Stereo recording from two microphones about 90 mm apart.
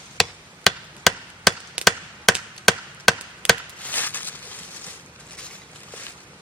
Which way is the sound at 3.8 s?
20° left (ahead or behind).